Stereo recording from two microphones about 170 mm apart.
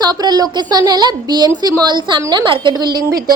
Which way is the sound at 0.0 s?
25° right (ahead or behind).